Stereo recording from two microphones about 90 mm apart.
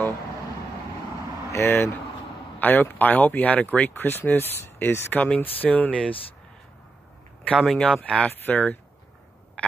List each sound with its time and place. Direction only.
1.5 s speech: 25° left (ahead or behind)
7.5 s speech: centre (ahead or behind); by 8.7 s 15° left (ahead or behind)
9.6 s a sound: 15° left (ahead or behind)